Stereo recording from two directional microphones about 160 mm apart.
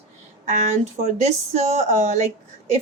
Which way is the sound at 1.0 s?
45° right (ahead or behind).